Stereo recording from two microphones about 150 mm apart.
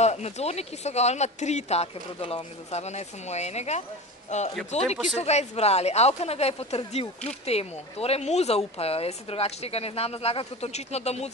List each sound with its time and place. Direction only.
0.0 s speech: 50° left (ahead or behind)